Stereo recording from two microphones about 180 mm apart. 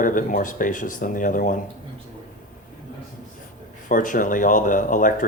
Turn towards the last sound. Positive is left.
turn(degrees=45)  # may be behind; listen again after turning